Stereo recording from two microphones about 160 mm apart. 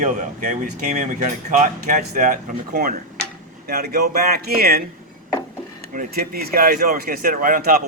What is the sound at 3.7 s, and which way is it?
Speech, 75° right (ahead or behind).